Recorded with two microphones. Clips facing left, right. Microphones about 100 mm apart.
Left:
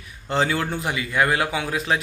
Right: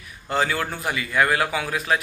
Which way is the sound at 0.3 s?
25° left (ahead or behind).